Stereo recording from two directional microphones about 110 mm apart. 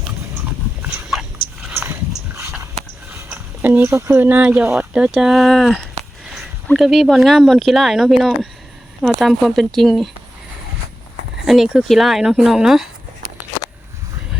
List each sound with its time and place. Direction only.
1.7 s dog: 20° right (ahead or behind)
3.1 s speech: 20° right (ahead or behind); by 10.1 s centre (ahead or behind)
11.4 s speech: centre (ahead or behind)